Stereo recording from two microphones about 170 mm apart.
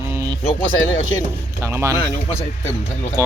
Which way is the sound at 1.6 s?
15° right (ahead or behind).